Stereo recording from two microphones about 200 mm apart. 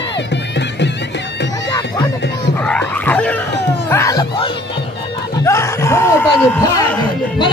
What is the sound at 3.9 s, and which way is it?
Music, 15° left (ahead or behind).